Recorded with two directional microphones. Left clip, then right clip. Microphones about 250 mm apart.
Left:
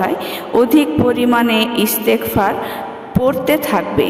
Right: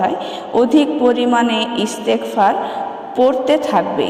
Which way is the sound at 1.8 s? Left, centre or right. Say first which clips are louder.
Left 2 dB; left.